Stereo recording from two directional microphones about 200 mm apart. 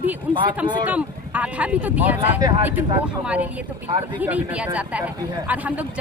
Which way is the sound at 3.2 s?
5° right (ahead or behind).